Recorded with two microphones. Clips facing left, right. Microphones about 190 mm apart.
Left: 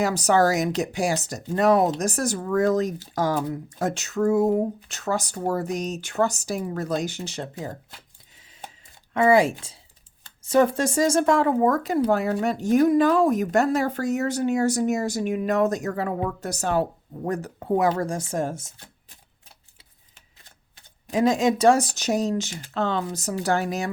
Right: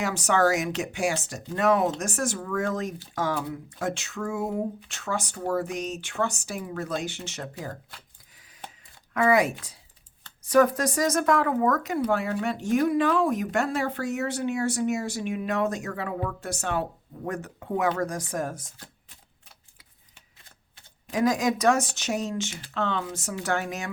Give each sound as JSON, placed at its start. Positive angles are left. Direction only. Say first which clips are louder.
{"t": 0.0, "sound": "speech", "louder": "left 4 dB", "side_deg": 40}
{"t": 9.1, "sound": "speech", "louder": "left 4 dB", "side_deg": 30}
{"t": 21.1, "sound": "speech", "louder": "left 3 dB", "side_deg": 25}